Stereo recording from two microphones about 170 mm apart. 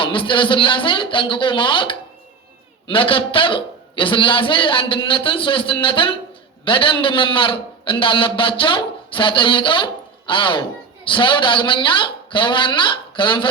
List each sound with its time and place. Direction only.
0.0 s a man's voice: 30° left (ahead or behind)